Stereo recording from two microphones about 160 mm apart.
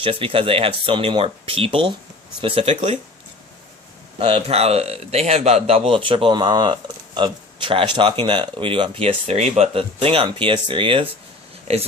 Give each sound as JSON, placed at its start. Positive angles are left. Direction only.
{"t": 0.0, "sound": "speech", "side_deg": -35}
{"t": 4.2, "sound": "speech", "side_deg": -35}